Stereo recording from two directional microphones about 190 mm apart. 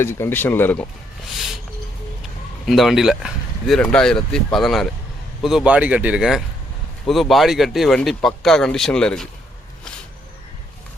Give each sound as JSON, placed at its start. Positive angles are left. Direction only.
{"t": 0.0, "sound": "speech", "side_deg": 10}
{"t": 2.6, "sound": "speech", "side_deg": 0}